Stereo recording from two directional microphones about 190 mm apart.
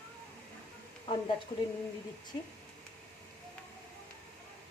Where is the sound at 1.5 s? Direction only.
20° left (ahead or behind).